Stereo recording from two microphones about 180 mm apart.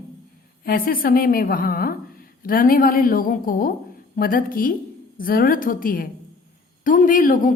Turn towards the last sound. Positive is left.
turn(degrees=50)  # may be behind; listen again after turning